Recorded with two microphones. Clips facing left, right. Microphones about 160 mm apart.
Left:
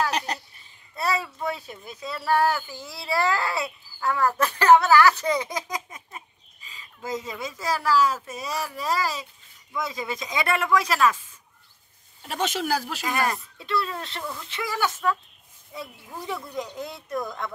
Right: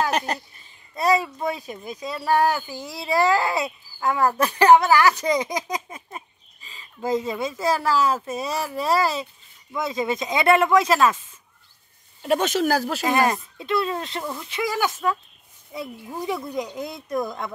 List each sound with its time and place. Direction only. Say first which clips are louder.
0.3 s speech: right 4 dB; 50° right (ahead or behind)
0.9 s speech: right 6 dB; 15° right (ahead or behind)
5.9 s speech: right 5 dB; 30° right (ahead or behind)
12.3 s speech: right 6 dB; 50° right (ahead or behind)
13.1 s speech: right 5 dB; 20° right (ahead or behind)